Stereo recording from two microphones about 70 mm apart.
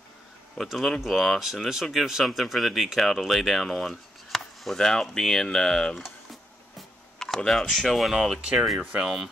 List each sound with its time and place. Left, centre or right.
0.6 s speech: centre
7.2 s speech: centre
8.4 s speech: centre